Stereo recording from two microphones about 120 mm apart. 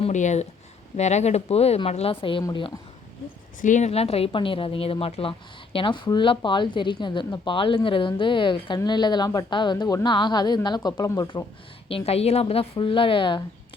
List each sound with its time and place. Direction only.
0.1 s speech: 85° left
0.9 s a woman's voice: 70° left (ahead or behind); by 2.7 s 40° left (ahead or behind)
3.6 s a woman's voice: 85° left; by 5.3 s 55° left (ahead or behind)
5.7 s speech: 40° left (ahead or behind)
11.9 s a woman's voice: 55° left (ahead or behind)